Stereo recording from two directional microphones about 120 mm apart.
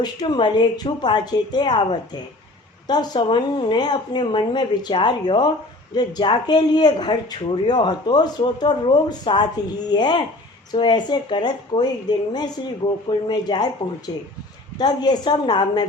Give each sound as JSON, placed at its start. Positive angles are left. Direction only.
{"t": 0.0, "sound": "speech", "side_deg": 40}